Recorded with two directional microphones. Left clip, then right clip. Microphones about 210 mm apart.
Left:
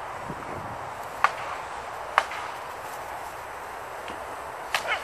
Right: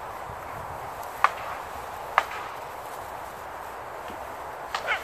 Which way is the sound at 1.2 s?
10° left (ahead or behind).